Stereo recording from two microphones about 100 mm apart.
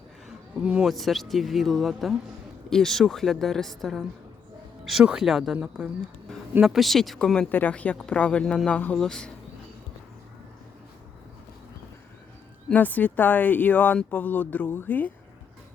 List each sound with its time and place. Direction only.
0.3 s a sound: 10° right (ahead or behind)
0.9 s a woman's voice: centre (ahead or behind)
6.6 s a woman's voice: 5° right (ahead or behind)
7.3 s speech: 15° left (ahead or behind)
12.7 s speech: 15° left (ahead or behind)